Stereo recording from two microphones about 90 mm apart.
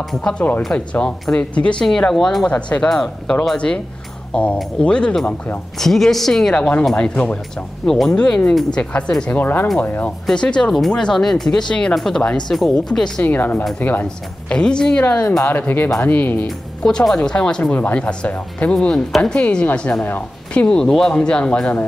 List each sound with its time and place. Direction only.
0.1 s speech: 10° left (ahead or behind)
9.4 s speech: 20° left (ahead or behind)
13.2 s speech: 20° left (ahead or behind)
14.0 s speech: 10° left (ahead or behind)
16.4 s speech: 5° left (ahead or behind)